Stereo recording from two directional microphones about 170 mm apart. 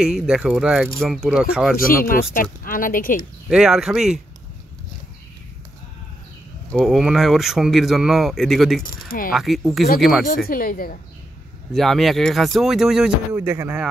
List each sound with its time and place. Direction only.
0.0 s speech: 5° right (ahead or behind)
1.8 s speech: 55° left (ahead or behind)
3.4 s speech: 5° right (ahead or behind)
6.7 s speech: centre (ahead or behind)
8.8 s speech: 55° left (ahead or behind)
9.3 s speech: centre (ahead or behind)
10.5 s speech: 55° left (ahead or behind)
11.7 s speech: centre (ahead or behind)
13.3 s speech: 15° right (ahead or behind)